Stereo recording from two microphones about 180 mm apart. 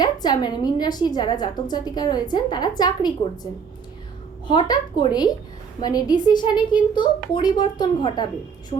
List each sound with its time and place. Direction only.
0.0 s a woman's voice: 20° left (ahead or behind)
4.4 s a woman's voice: 25° left (ahead or behind)